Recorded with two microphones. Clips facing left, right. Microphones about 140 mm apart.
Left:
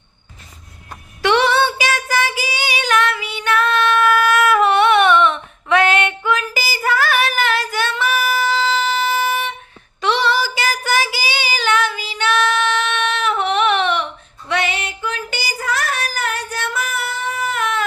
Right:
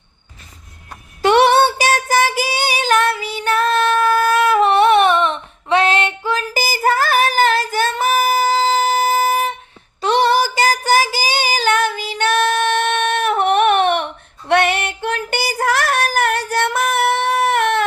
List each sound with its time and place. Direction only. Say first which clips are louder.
1.2 s child singing: right 4 dB; 45° right (ahead or behind)
10.0 s female singing: right 3 dB; 45° right (ahead or behind); by 17.8 s 60° right (ahead or behind)